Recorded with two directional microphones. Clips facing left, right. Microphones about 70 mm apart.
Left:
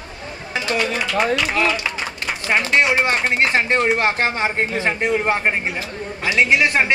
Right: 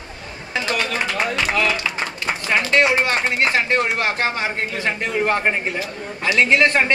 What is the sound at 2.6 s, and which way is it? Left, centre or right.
A man's voice, left.